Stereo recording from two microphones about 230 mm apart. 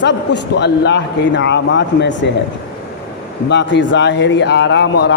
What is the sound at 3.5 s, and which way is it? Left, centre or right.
A man's voice, left.